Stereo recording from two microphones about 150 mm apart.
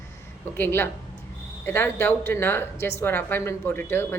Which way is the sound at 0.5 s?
15° left (ahead or behind).